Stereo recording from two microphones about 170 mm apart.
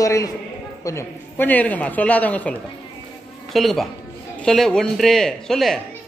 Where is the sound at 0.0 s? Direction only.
20° left (ahead or behind).